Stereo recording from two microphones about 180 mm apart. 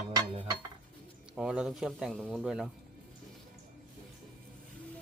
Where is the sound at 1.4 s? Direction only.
5° right (ahead or behind).